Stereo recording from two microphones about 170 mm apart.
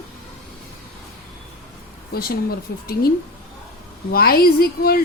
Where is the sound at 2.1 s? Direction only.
65° left (ahead or behind).